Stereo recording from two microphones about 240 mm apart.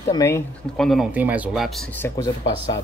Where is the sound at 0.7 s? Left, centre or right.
Centre.